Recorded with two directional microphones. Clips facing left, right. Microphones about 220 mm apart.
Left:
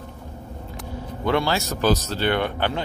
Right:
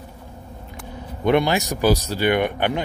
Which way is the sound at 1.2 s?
20° right (ahead or behind).